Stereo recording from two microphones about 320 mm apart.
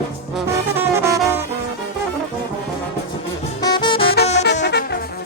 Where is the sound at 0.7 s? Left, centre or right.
Centre.